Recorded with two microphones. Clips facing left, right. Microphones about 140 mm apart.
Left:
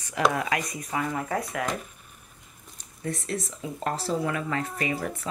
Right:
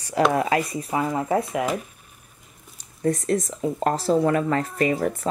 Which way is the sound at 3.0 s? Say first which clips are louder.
Right 9 dB; 40° right (ahead or behind).